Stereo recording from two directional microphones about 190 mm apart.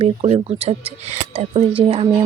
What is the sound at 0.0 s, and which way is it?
Speech, 35° right (ahead or behind).